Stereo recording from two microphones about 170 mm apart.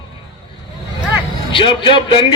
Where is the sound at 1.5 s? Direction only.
30° left (ahead or behind).